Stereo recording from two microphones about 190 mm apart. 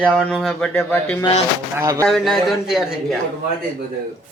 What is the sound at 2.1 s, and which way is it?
Speech, centre (ahead or behind).